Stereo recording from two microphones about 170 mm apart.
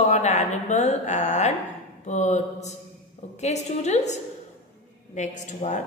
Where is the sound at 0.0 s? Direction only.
45° left (ahead or behind).